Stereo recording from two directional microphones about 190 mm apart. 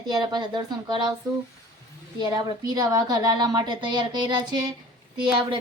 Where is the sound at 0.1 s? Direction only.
20° right (ahead or behind).